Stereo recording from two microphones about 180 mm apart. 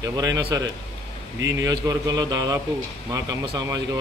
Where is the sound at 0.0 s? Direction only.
20° right (ahead or behind).